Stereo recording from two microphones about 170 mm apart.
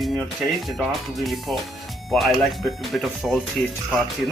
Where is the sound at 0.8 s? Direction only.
Centre (ahead or behind).